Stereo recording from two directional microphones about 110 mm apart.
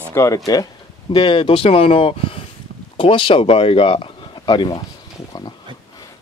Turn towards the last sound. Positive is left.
turn(degrees=40)  # may be behind; listen again after turning